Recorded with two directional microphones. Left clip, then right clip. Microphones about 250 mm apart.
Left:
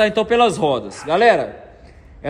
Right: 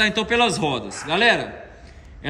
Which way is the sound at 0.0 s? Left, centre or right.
Centre.